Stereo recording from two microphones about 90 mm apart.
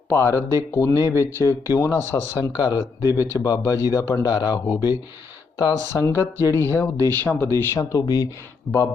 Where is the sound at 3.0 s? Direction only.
30° right (ahead or behind).